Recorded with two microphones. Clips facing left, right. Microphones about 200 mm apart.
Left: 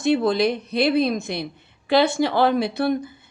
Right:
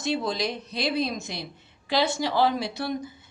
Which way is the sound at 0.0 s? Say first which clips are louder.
Left 8 dB; 60° left (ahead or behind).